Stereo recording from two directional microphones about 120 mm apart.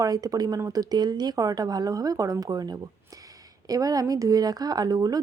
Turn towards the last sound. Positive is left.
turn(degrees=-30)  # may be behind; listen again after turning